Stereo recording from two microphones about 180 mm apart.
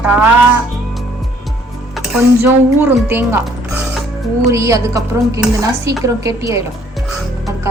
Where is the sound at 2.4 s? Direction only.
10° right (ahead or behind).